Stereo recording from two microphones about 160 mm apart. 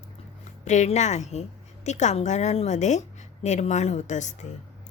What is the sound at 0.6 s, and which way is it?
A woman's voice, 45° left (ahead or behind).